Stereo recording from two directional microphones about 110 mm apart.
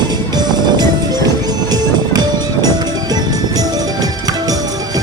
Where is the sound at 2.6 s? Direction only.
35° right (ahead or behind).